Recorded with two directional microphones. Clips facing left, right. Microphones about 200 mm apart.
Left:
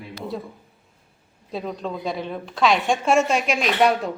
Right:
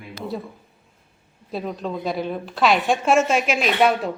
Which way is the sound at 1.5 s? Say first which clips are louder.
Right 1 dB; 5° right (ahead or behind).